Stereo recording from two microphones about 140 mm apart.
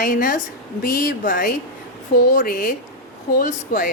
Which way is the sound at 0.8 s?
90° left.